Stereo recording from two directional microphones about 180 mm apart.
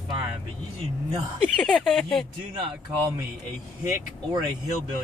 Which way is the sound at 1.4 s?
5° left (ahead or behind).